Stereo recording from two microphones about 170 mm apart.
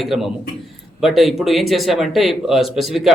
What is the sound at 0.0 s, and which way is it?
Speech, centre (ahead or behind).